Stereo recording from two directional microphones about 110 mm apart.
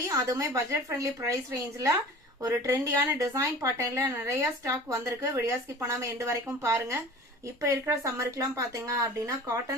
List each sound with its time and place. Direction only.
0.0 s speech: 30° right (ahead or behind)